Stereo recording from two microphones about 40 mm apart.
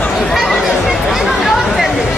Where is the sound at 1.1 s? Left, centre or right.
Centre.